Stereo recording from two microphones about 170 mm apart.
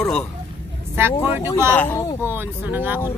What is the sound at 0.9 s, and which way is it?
Speech, 15° right (ahead or behind).